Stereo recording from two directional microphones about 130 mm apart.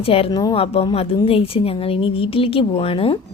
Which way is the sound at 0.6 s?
50° left (ahead or behind).